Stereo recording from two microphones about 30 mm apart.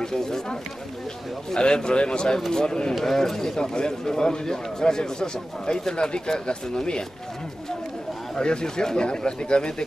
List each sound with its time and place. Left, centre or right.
0.0 s speech: centre
1.5 s a man's voice: left
2.9 s speech: centre
3.3 s a man's voice: centre
8.4 s a man's voice: left